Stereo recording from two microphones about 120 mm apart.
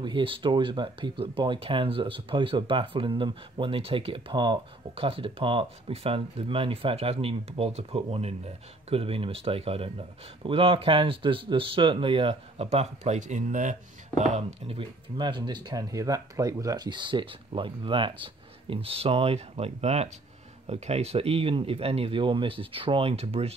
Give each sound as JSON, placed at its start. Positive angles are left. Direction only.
{"t": 0.0, "sound": "speech", "side_deg": -45}
{"t": 14.3, "sound": "speech", "side_deg": -55}
{"t": 15.1, "sound": "speech", "side_deg": -40}